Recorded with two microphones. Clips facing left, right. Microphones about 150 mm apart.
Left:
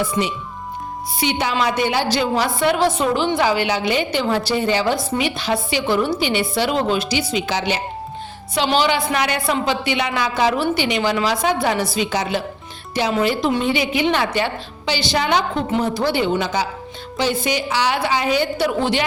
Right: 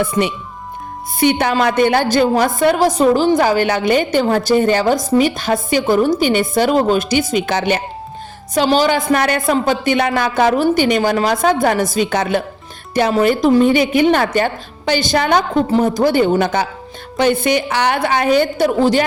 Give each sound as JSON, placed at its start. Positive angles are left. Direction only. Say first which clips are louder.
{"t": 0.0, "sound": "a woman's voice", "louder": "right 4 dB", "side_deg": -60}
{"t": 8.5, "sound": "a woman's voice", "louder": "right 4 dB", "side_deg": -40}